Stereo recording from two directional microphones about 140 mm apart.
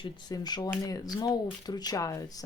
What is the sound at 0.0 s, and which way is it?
Speech, 30° left (ahead or behind).